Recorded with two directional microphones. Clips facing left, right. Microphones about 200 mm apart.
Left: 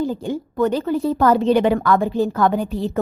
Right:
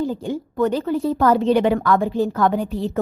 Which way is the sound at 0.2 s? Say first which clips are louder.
Left 1 dB; 35° left (ahead or behind).